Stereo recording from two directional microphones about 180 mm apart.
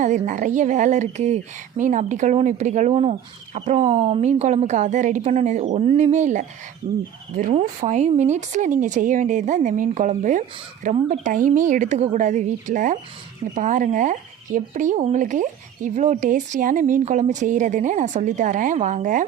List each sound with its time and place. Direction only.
0.0 s speech: 45° right (ahead or behind)